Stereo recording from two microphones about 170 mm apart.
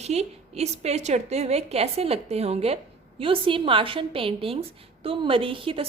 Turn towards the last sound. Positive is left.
turn(degrees=-30)  # may be behind; listen again after turning